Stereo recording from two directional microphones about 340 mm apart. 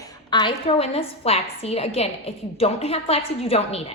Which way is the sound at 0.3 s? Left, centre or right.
Centre.